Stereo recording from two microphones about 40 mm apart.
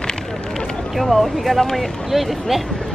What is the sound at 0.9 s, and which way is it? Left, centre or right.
Speech, centre.